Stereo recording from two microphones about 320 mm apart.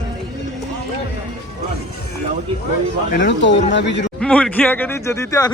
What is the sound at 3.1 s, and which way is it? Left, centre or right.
Speech, left.